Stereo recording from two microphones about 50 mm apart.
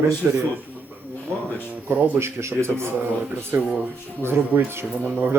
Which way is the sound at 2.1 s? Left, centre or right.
Right.